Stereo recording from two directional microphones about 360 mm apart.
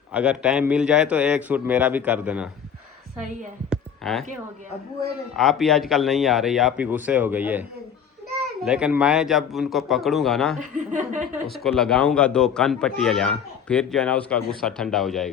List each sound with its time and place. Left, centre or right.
0.1 s speech: centre
3.7 s a sound: centre
5.4 s speech: centre
10.6 s speech: right
11.4 s speech: centre